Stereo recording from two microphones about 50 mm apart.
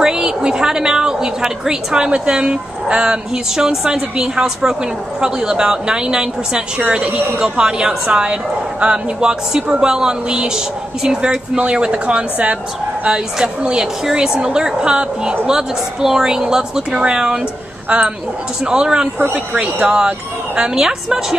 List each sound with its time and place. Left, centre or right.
0.0 s a woman's voice: centre
19.3 s a woman's voice: right